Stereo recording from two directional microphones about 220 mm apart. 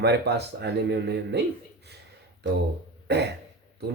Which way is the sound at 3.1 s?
50° right (ahead or behind).